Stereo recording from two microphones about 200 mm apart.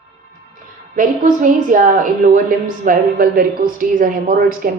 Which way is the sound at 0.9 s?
40° right (ahead or behind).